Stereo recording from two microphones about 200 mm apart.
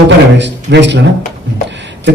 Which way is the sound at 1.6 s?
60° right (ahead or behind).